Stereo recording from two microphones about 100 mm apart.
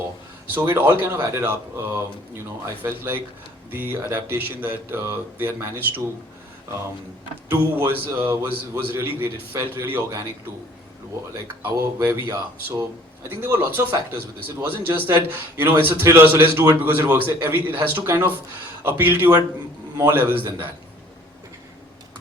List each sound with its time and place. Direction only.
0.6 s a man's voice: 25° right (ahead or behind)
7.4 s a man's voice: 20° right (ahead or behind)
11.6 s a man's voice: 25° right (ahead or behind)